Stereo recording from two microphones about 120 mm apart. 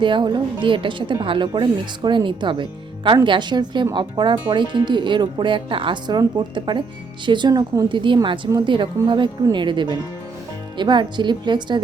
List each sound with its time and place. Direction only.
0.0 s a woman's voice: 40° right (ahead or behind)